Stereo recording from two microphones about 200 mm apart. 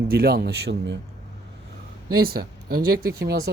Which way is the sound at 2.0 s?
50° right (ahead or behind).